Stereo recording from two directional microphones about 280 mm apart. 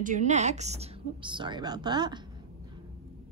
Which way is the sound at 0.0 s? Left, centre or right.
Right.